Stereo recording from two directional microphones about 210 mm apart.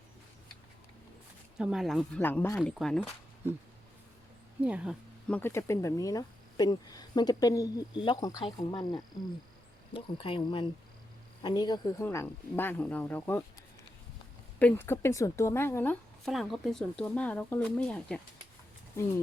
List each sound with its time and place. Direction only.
1.5 s speech: 5° right (ahead or behind)
4.6 s speech: 5° right (ahead or behind)
5.3 s speech: 10° left (ahead or behind)
14.6 s speech: 10° left (ahead or behind)